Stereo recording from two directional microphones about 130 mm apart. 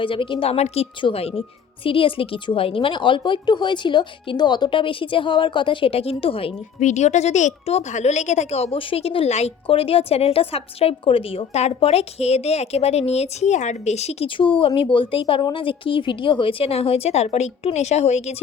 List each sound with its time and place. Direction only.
0.0 s a woman's voice: 40° left (ahead or behind)
6.7 s speech: 65° left (ahead or behind)
14.3 s a woman's voice: 40° left (ahead or behind); by 18.3 s 55° left (ahead or behind)